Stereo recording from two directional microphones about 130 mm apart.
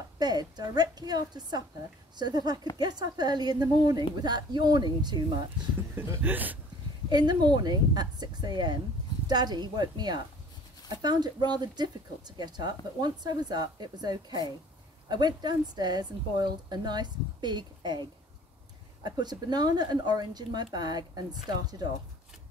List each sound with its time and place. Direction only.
0.2 s speech: 30° right (ahead or behind)
5.9 s speech: 15° right (ahead or behind)
7.1 s speech: 35° right (ahead or behind)
19.0 s speech: 30° right (ahead or behind)